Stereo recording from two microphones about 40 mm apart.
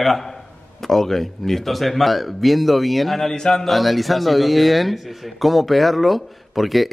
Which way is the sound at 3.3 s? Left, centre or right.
Centre.